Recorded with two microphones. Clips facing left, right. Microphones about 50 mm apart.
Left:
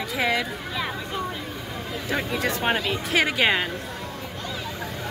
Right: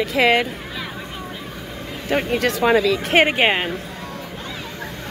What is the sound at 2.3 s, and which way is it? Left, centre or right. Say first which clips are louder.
Speech: right 6 dB; right.